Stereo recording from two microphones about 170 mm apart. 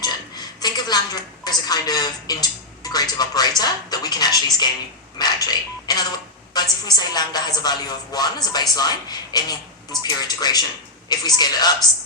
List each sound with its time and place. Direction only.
0.0 s a woman's voice: 25° left (ahead or behind)